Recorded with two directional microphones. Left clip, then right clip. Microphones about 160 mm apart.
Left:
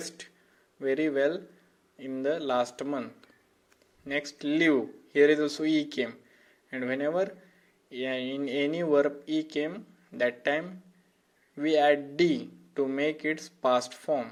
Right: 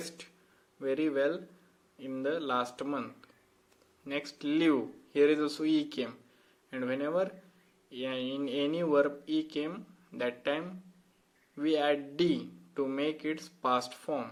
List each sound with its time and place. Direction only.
0.8 s speech: 20° left (ahead or behind)